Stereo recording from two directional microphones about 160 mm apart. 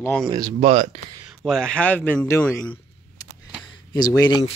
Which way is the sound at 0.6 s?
40° right (ahead or behind).